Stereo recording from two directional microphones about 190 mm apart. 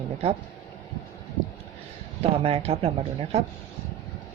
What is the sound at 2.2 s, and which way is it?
Speech, 30° right (ahead or behind).